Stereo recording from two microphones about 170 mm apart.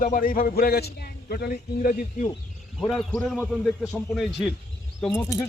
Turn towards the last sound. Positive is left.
turn(degrees=15)  # may be behind; listen again after turning